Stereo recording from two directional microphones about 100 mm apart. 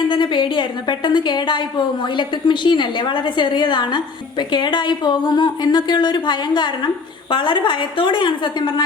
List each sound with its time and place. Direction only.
0.1 s a woman's voice: 50° left (ahead or behind)